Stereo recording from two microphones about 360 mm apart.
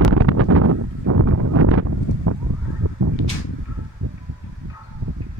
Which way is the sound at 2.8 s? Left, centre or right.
Right.